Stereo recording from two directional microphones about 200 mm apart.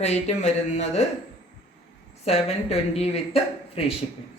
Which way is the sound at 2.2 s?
30° left (ahead or behind).